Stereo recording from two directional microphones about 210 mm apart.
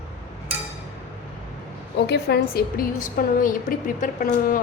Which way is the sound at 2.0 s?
50° left (ahead or behind).